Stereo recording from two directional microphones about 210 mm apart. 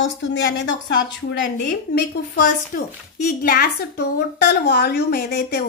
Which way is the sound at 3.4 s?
45° left (ahead or behind).